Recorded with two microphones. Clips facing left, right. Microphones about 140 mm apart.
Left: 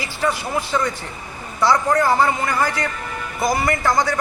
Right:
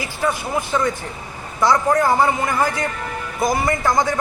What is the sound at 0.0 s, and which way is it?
Speech, 20° right (ahead or behind).